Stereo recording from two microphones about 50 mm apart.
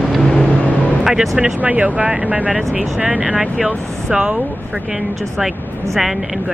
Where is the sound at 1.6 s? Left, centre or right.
Right.